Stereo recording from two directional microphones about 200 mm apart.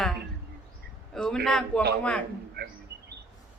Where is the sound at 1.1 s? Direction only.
5° left (ahead or behind).